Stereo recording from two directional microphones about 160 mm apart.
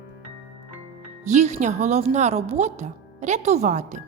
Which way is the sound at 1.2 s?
45° right (ahead or behind).